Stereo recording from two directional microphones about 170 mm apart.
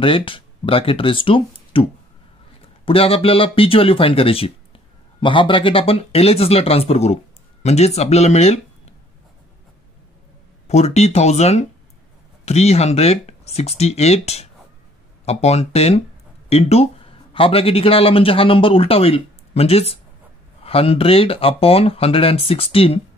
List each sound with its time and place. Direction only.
0.0 s speech: 30° left (ahead or behind)
10.7 s speech: 40° left (ahead or behind)